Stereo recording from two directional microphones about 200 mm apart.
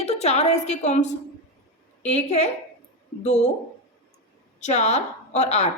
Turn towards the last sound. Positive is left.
turn(degrees=35)  # may be behind; listen again after turning